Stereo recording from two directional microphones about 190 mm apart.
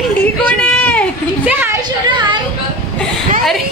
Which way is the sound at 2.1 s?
25° right (ahead or behind).